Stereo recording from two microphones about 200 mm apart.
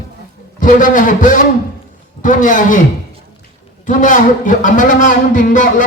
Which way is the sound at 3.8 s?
40° left (ahead or behind).